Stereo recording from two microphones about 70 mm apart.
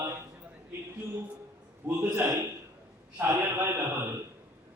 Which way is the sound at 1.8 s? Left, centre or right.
Right.